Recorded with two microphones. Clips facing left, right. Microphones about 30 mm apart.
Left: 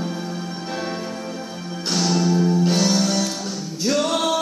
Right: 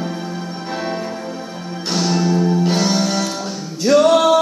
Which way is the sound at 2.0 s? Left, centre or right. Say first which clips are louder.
Right 2 dB; centre.